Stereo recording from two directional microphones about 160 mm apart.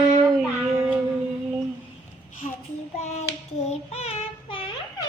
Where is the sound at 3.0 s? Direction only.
45° left (ahead or behind).